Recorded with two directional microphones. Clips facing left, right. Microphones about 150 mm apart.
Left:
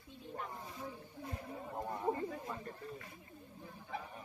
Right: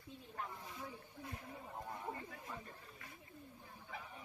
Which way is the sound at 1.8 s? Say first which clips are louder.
Left 10 dB; 55° left (ahead or behind).